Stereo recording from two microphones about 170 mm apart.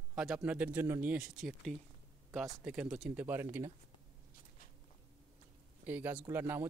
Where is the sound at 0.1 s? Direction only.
5° right (ahead or behind).